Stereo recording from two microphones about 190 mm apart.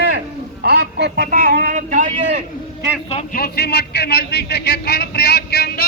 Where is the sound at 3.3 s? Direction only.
55° left (ahead or behind).